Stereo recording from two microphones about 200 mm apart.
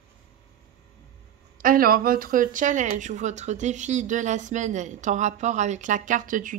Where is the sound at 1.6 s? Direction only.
45° right (ahead or behind).